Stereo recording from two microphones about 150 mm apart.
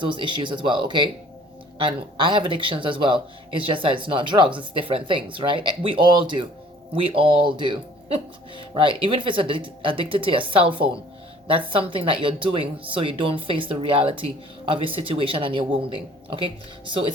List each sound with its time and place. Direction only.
0.0 s speech: 35° right (ahead or behind)